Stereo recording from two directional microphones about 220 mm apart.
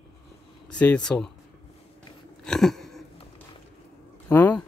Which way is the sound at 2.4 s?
Centre (ahead or behind).